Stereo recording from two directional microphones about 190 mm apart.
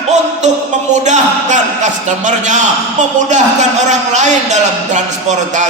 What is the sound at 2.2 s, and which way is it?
Music, 40° right (ahead or behind).